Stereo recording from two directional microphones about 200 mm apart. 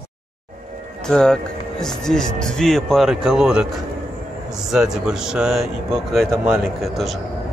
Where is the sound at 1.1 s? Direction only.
5° left (ahead or behind).